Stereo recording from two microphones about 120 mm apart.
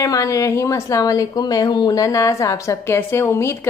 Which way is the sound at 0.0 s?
30° left (ahead or behind).